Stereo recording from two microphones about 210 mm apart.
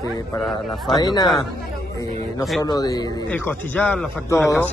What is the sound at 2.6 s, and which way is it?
A man's voice, 20° left (ahead or behind).